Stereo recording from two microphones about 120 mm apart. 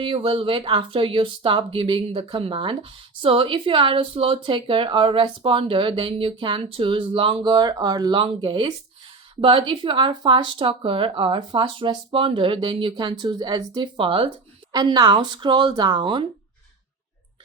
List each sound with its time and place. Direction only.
0.0 s speech: 45° right (ahead or behind)
8.2 s speech: 45° right (ahead or behind)